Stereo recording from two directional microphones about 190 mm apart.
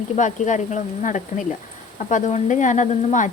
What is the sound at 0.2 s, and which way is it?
Speech, 40° left (ahead or behind).